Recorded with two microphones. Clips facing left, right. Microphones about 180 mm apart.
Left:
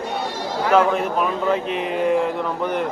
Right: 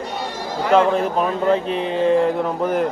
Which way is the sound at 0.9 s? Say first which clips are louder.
Right 2 dB; 35° right (ahead or behind).